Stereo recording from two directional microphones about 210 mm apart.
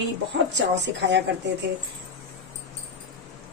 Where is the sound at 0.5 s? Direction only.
55° right (ahead or behind).